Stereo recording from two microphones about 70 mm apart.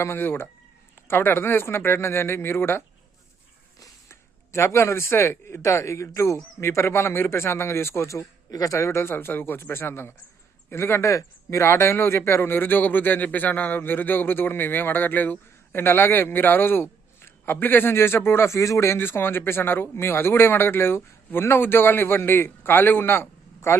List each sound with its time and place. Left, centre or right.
0.0 s a man's voice: left
4.1 s a man's voice: left
8.4 s a man's voice: left